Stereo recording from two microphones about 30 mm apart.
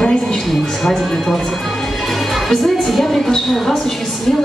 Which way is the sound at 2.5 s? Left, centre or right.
Centre.